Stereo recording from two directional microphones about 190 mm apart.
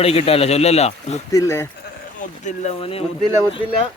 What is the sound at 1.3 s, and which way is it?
Speech, 15° left (ahead or behind).